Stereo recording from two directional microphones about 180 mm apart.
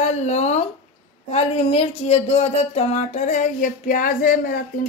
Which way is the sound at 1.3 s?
35° left (ahead or behind).